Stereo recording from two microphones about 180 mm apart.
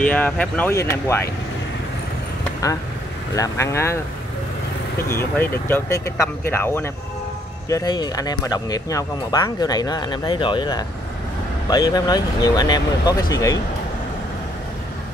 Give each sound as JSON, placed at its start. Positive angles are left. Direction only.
{"t": 0.0, "sound": "speech", "side_deg": 10}
{"t": 3.3, "sound": "speech", "side_deg": 15}
{"t": 5.1, "sound": "speech", "side_deg": 15}